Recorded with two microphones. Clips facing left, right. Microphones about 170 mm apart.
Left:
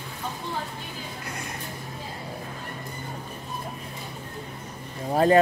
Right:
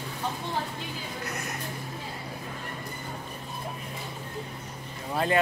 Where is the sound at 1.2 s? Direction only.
30° left (ahead or behind).